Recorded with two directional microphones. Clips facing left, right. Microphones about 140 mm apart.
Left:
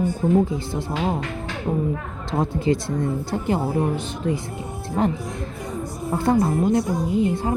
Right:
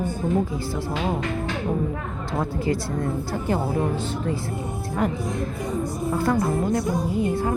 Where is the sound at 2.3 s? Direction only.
20° left (ahead or behind).